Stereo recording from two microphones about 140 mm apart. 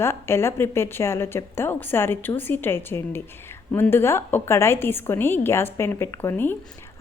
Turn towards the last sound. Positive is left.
turn(degrees=15)  # may be behind; listen again after turning